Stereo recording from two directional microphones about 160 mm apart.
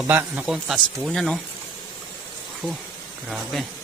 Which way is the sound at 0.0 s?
10° right (ahead or behind).